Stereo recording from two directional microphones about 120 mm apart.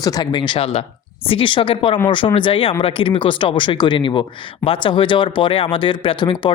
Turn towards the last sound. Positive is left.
turn(degrees=40)  # may be behind; listen again after turning